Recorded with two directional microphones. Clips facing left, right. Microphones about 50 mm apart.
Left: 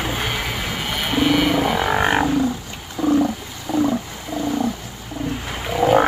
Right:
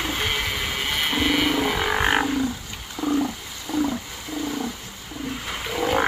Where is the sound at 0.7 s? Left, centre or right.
Centre.